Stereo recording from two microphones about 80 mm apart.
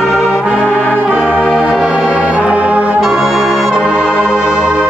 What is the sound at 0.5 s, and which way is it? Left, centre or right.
Brass instrument, centre.